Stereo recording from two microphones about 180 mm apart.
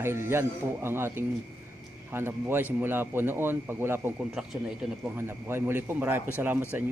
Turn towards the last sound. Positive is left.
turn(degrees=-10)  # may be behind; listen again after turning